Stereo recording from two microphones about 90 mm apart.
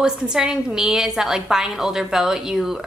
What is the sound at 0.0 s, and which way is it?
A woman's voice, 10° right (ahead or behind).